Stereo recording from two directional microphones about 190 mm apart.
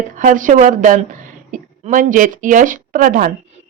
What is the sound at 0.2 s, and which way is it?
Speech, 45° right (ahead or behind).